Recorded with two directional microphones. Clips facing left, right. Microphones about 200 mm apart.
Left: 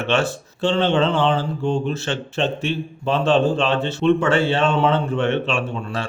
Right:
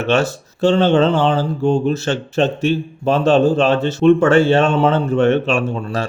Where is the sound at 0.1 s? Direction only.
40° right (ahead or behind).